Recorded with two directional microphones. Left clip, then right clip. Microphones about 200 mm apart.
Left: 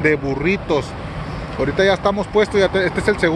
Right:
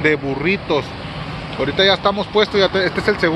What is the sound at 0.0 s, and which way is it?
Speech, 10° left (ahead or behind).